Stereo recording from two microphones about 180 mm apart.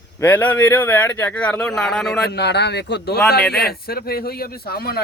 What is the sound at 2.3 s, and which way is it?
A man's voice, 70° left (ahead or behind).